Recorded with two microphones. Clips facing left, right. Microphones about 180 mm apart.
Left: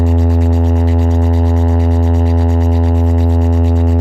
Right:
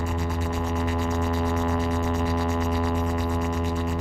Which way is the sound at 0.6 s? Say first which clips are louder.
Left 11 dB; 50° left (ahead or behind).